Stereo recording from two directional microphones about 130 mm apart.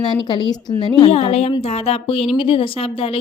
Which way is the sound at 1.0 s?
50° left (ahead or behind).